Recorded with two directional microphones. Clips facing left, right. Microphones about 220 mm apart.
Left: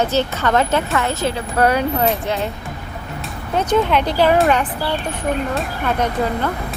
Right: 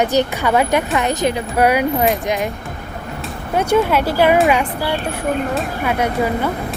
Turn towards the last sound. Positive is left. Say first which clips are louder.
# right 2 dB
turn(degrees=-10)  # may be behind; listen again after turning